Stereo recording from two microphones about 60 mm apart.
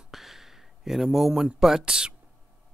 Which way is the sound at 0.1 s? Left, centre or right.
Centre.